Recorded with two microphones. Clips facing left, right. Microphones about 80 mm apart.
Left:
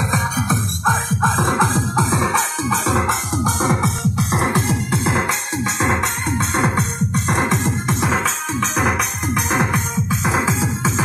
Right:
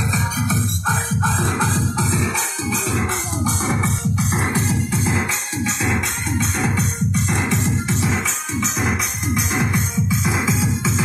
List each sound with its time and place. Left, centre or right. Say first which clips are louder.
0.1 s music: left 2 dB; left
2.9 s music: left 4 dB; left
5.9 s music: left 3 dB; left